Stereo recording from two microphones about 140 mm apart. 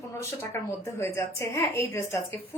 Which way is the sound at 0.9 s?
20° left (ahead or behind).